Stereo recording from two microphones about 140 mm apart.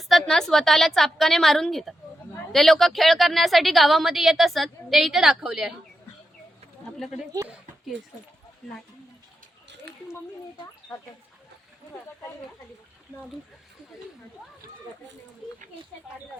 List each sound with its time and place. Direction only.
0.0 s a woman's voice: centre (ahead or behind)
7.3 s speech: 25° right (ahead or behind)